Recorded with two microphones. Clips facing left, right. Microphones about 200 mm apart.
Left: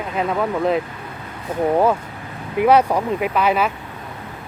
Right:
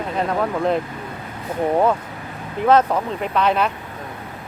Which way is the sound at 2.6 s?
10° left (ahead or behind).